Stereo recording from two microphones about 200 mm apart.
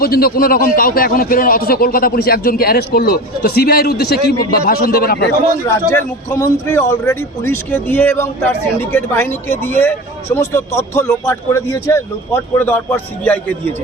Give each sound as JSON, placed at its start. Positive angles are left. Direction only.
{"t": 0.0, "sound": "a man's voice", "side_deg": 50}
{"t": 5.6, "sound": "a man's voice", "side_deg": 15}